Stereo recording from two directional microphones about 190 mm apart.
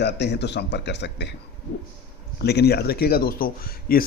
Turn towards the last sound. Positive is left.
turn(degrees=50)  # may be behind; listen again after turning